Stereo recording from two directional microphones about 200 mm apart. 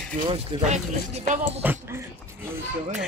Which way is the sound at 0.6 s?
35° right (ahead or behind).